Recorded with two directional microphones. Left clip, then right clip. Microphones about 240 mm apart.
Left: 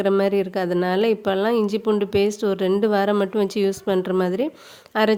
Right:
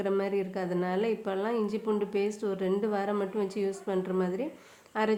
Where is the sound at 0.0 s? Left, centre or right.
Left.